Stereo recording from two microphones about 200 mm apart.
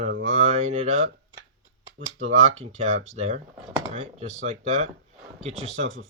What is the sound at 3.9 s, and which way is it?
Speech, 30° right (ahead or behind).